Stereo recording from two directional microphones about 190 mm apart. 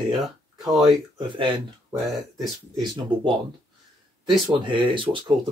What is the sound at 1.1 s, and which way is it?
Speech, 25° right (ahead or behind).